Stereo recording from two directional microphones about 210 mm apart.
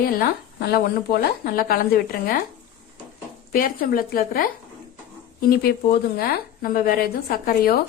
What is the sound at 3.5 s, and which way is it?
Speech, 45° left (ahead or behind).